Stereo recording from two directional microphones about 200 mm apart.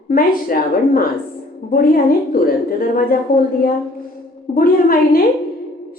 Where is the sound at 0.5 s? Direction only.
45° left (ahead or behind).